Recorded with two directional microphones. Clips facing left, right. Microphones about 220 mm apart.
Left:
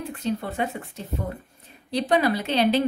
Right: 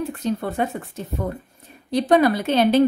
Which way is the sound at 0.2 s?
45° right (ahead or behind).